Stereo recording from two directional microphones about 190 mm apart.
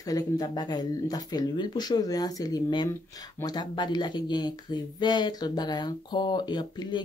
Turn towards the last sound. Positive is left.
turn(degrees=25)  # may be behind; listen again after turning